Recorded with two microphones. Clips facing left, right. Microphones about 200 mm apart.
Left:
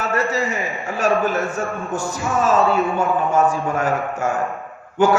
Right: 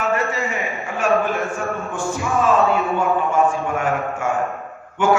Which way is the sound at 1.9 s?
40° left (ahead or behind).